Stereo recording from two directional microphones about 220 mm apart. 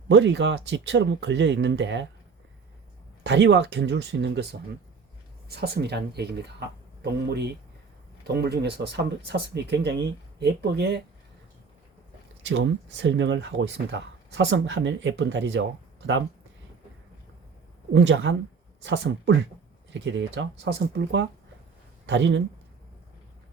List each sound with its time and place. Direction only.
0.1 s speech: 55° right (ahead or behind)
3.2 s speech: 55° right (ahead or behind)
5.5 s speech: 50° right (ahead or behind)
12.4 s speech: 55° right (ahead or behind)
17.9 s a man's voice: 55° right (ahead or behind)